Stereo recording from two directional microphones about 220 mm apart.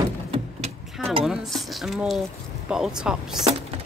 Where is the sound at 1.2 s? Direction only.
Centre (ahead or behind).